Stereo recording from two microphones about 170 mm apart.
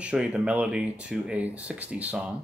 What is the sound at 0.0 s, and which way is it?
Speech, 5° right (ahead or behind).